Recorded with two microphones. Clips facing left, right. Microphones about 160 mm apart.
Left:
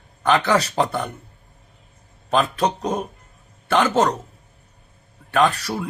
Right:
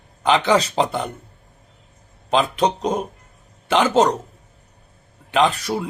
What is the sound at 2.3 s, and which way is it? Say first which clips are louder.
Speech: right 1 dB; 15° right (ahead or behind).